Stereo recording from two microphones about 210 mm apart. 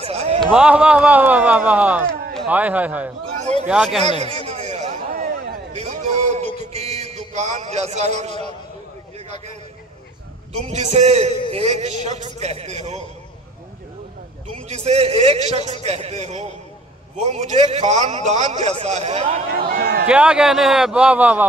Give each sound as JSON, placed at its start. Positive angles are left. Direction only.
{"t": 0.0, "sound": "a sound", "side_deg": -30}
{"t": 0.4, "sound": "a man's voice", "side_deg": -5}
{"t": 4.5, "sound": "a sound", "side_deg": -30}
{"t": 10.7, "sound": "a man's voice", "side_deg": -35}
{"t": 14.5, "sound": "a man's voice", "side_deg": -30}
{"t": 19.5, "sound": "a man's voice", "side_deg": -45}
{"t": 20.1, "sound": "a man's voice", "side_deg": -5}